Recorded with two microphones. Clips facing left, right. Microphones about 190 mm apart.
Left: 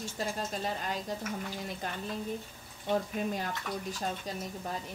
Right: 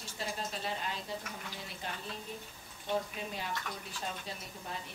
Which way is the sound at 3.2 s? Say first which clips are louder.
Left 6 dB; 45° left (ahead or behind).